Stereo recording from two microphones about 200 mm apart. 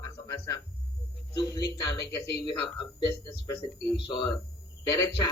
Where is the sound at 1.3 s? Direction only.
20° left (ahead or behind).